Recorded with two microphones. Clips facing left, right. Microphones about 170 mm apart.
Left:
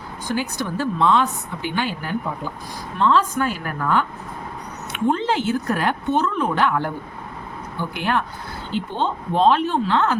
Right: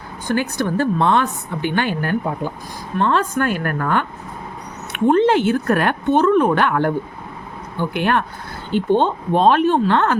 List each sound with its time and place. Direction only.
0.3 s a woman's voice: 55° right (ahead or behind)